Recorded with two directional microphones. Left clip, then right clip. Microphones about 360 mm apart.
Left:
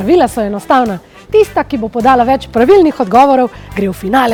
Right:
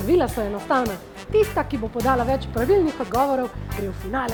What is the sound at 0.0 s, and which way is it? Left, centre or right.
Speech, left.